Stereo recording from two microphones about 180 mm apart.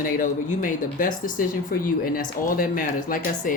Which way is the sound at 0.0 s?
50° left (ahead or behind).